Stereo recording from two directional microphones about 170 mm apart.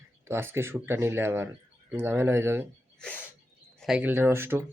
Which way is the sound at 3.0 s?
5° left (ahead or behind).